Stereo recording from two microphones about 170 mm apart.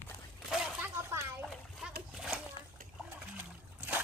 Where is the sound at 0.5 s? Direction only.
15° right (ahead or behind).